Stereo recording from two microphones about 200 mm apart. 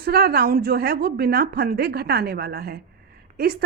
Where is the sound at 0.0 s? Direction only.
50° right (ahead or behind).